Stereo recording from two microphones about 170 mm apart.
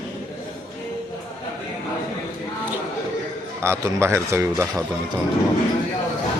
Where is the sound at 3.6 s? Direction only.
15° right (ahead or behind).